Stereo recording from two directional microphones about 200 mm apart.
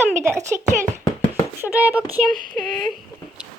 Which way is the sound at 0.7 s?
35° right (ahead or behind).